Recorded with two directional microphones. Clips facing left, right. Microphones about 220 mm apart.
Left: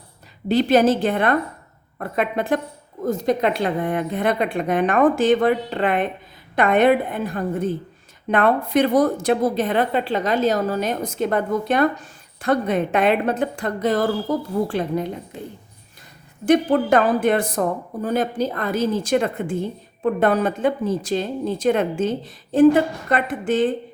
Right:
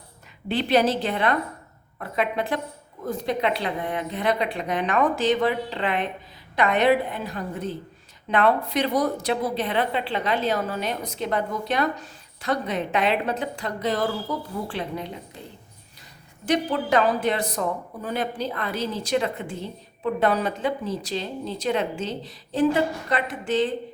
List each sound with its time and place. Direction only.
0.4 s a woman's voice: 40° left (ahead or behind)
16.5 s a woman's voice: 50° left (ahead or behind)